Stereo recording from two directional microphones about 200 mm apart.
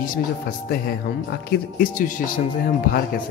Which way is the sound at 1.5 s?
45° left (ahead or behind).